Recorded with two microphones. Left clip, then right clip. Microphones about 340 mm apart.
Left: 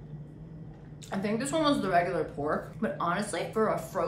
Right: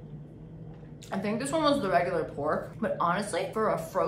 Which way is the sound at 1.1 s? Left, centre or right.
Centre.